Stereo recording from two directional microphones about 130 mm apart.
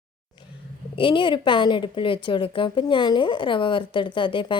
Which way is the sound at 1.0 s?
40° left (ahead or behind).